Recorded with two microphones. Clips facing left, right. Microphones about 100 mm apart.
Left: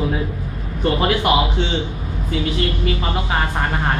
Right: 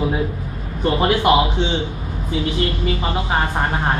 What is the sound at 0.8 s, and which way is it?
Speech, 15° right (ahead or behind).